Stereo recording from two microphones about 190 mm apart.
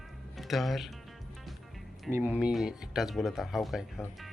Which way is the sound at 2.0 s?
10° right (ahead or behind).